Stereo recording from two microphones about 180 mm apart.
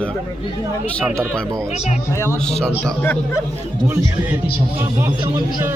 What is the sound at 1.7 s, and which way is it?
Speech, 35° left (ahead or behind).